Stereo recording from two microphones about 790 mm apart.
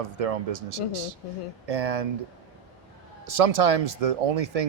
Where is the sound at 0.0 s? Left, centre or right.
Right.